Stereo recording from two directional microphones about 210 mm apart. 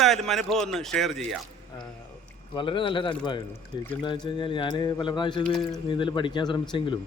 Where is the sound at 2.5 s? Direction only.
25° left (ahead or behind).